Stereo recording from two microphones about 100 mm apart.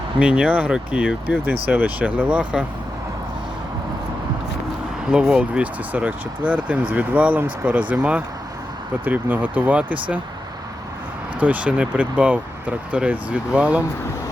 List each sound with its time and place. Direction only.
0.2 s speech: 10° right (ahead or behind)
5.0 s speech: 10° right (ahead or behind)
11.3 s speech: 15° right (ahead or behind)